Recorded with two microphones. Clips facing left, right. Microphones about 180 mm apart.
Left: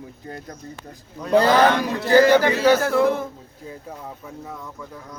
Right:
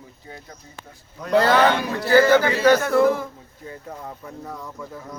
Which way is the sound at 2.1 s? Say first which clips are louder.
Left 1 dB; 15° left (ahead or behind).